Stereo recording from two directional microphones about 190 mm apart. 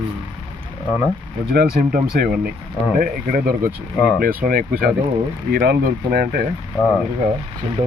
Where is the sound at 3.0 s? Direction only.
50° right (ahead or behind).